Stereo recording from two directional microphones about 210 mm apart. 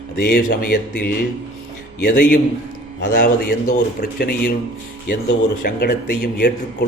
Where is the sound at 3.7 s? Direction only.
45° left (ahead or behind).